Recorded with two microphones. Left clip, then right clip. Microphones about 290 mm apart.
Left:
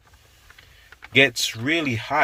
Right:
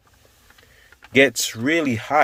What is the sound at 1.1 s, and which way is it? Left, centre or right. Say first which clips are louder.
Speech: right 1 dB; centre.